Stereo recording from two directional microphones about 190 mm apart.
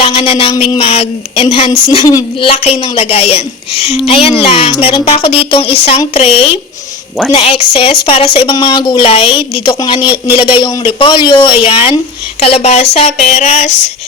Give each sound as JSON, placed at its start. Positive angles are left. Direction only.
{"t": 0.0, "sound": "a sound", "side_deg": 30}
{"t": 0.5, "sound": "a woman's voice", "side_deg": 25}
{"t": 2.0, "sound": "a woman's voice", "side_deg": 20}
{"t": 2.5, "sound": "a woman's voice", "side_deg": 35}